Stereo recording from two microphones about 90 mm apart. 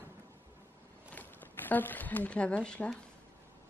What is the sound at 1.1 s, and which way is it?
Speech, 20° left (ahead or behind).